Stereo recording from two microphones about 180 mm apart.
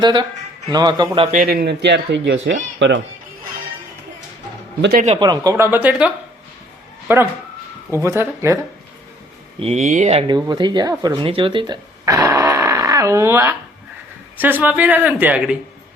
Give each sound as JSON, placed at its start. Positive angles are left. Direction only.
{"t": 0.0, "sound": "speech", "side_deg": -25}
{"t": 1.3, "sound": "speech", "side_deg": -50}
{"t": 4.8, "sound": "a man's voice", "side_deg": -60}
{"t": 5.0, "sound": "speech", "side_deg": -25}
{"t": 7.1, "sound": "speech", "side_deg": -10}
{"t": 9.6, "sound": "speech", "side_deg": -35}
{"t": 14.6, "sound": "speech", "side_deg": -10}